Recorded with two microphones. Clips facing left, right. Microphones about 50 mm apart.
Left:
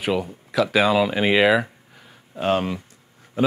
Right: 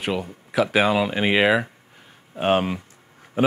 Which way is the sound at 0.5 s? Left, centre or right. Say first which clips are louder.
Left 1 dB; centre.